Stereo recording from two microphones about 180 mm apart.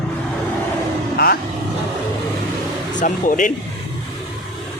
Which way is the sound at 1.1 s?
60° left (ahead or behind).